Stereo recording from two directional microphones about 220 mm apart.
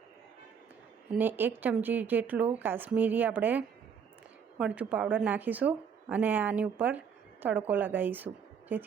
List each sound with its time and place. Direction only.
1.1 s speech: 10° right (ahead or behind)